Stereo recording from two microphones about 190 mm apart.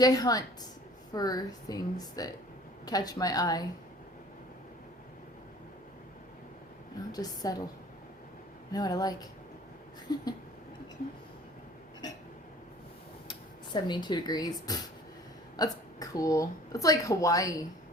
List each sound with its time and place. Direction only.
0.0 s a woman's voice: 20° left (ahead or behind)
7.1 s a woman's voice: 20° left (ahead or behind)
8.7 s a woman's voice: 20° left (ahead or behind)
13.7 s a woman's voice: 25° left (ahead or behind)